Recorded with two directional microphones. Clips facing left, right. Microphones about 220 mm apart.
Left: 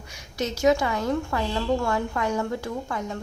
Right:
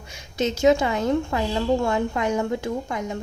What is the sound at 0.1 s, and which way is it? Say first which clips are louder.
A woman's voice: right 4 dB; 25° right (ahead or behind).